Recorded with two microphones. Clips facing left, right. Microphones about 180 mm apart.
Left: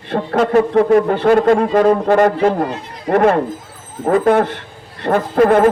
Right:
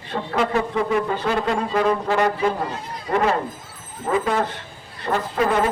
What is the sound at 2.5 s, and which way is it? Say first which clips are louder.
A man's voice: left 7 dB; 65° left (ahead or behind).